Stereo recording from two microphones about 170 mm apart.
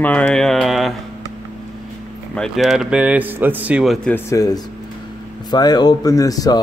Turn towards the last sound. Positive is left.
turn(degrees=20)  # may be behind; listen again after turning